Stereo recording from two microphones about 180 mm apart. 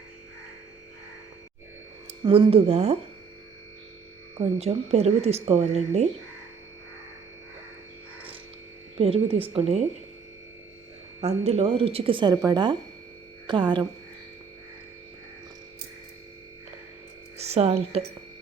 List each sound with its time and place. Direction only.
2.2 s speech: 30° right (ahead or behind)
4.5 s speech: 35° right (ahead or behind)
9.0 s speech: 35° right (ahead or behind)
11.2 s speech: 35° right (ahead or behind)
17.3 s speech: 35° right (ahead or behind)